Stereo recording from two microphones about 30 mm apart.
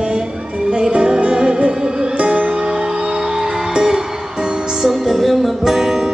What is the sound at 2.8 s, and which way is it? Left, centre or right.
Music, right.